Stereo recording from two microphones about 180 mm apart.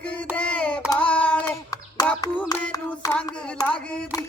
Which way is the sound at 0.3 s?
5° left (ahead or behind).